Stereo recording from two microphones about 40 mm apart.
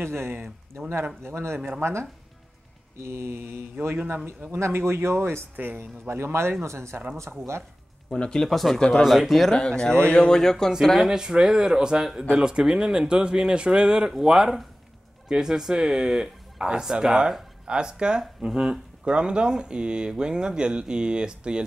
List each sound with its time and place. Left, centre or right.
0.0 s speech: right
3.8 s speech: right
5.6 s speech: right
6.9 s speech: right
8.2 s speech: centre
8.5 s speech: centre
8.7 s speech: centre
9.0 s speech: centre
9.5 s speech: centre
10.3 s speech: centre
11.1 s speech: centre
17.6 s speech: right